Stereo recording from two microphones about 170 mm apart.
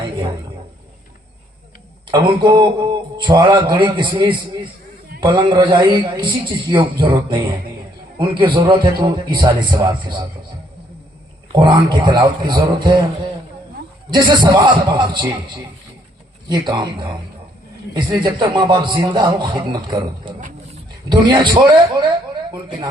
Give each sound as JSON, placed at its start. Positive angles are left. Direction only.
{"t": 2.0, "sound": "a man's voice", "side_deg": -25}
{"t": 11.5, "sound": "a man's voice", "side_deg": -25}
{"t": 14.1, "sound": "a man's voice", "side_deg": -25}
{"t": 16.5, "sound": "a man's voice", "side_deg": -25}